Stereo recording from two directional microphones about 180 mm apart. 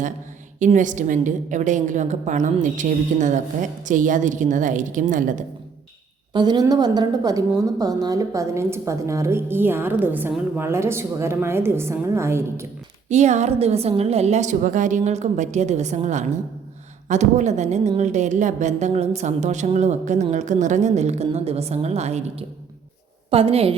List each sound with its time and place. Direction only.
0.6 s a woman's voice: 45° right (ahead or behind)
6.3 s a woman's voice: 25° right (ahead or behind)
13.1 s a woman's voice: 40° right (ahead or behind)